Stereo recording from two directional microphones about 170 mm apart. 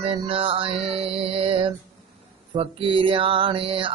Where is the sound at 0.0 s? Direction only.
35° right (ahead or behind).